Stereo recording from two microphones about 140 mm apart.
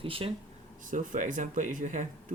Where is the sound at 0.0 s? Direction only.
40° right (ahead or behind).